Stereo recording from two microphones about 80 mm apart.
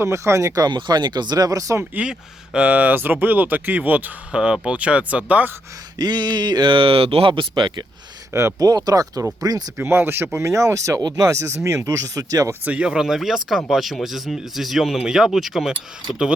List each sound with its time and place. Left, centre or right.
0.0 s speech: right
1.8 s speech: centre
4.3 s speech: centre
6.0 s mantra: right
7.3 s speech: right
8.3 s speech: right
8.5 s speech: right
9.7 s speech: right
12.6 s speech: centre